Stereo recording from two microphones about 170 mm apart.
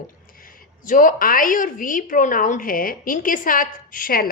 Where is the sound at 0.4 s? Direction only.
50° left (ahead or behind).